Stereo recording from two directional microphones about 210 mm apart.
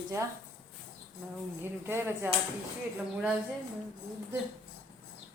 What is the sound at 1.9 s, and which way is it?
Speech, 10° right (ahead or behind).